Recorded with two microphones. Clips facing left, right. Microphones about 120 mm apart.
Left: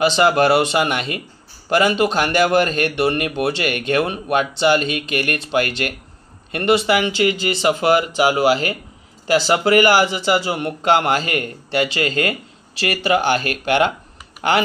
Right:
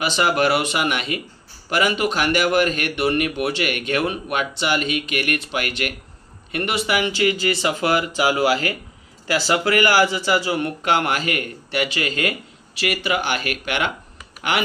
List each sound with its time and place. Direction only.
0.0 s a man's voice: 30° left (ahead or behind)